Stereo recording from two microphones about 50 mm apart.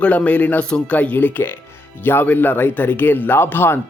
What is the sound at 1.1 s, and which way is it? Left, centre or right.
Speech, left.